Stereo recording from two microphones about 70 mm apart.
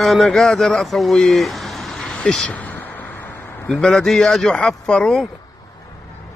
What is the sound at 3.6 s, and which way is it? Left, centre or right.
Speech, centre.